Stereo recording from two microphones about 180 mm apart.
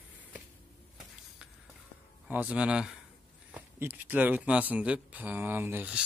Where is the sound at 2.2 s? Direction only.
10° right (ahead or behind).